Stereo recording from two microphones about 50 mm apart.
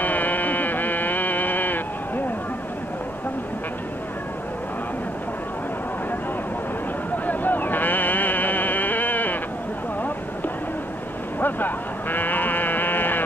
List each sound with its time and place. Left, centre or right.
0.0 s music: left
7.2 s a sound: left
11.3 s sheep: left